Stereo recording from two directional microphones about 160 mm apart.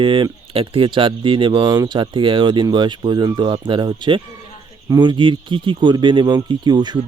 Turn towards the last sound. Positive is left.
turn(degrees=-25)  # may be behind; listen again after turning